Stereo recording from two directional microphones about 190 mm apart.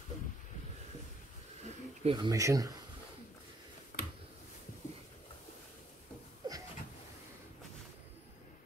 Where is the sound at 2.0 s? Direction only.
20° right (ahead or behind).